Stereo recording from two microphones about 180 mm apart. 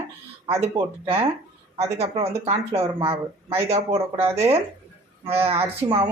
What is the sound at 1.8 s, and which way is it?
Speech, 35° right (ahead or behind).